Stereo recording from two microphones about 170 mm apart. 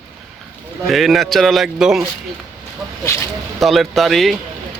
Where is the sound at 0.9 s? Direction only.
Centre (ahead or behind).